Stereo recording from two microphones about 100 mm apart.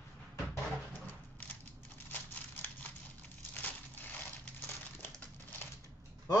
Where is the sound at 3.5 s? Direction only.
20° left (ahead or behind).